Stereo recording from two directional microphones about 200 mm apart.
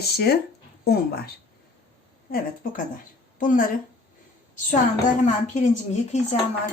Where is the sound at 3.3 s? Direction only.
40° left (ahead or behind).